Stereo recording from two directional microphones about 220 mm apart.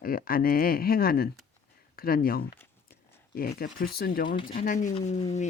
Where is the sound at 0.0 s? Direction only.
40° left (ahead or behind).